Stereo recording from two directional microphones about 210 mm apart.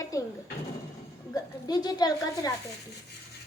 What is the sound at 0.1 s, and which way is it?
Speech, 15° left (ahead or behind).